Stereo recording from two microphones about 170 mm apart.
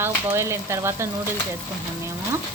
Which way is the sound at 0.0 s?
15° right (ahead or behind).